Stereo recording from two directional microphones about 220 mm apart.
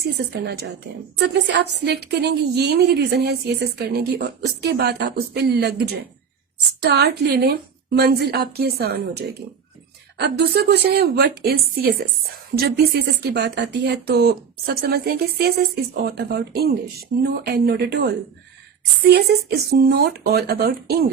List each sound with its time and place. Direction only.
0.3 s speech: 50° right (ahead or behind)